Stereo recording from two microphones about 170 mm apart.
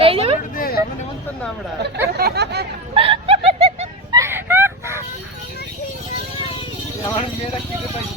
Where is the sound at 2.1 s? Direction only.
70° right (ahead or behind).